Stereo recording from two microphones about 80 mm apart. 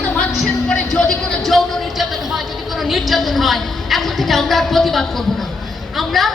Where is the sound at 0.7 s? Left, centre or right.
Centre.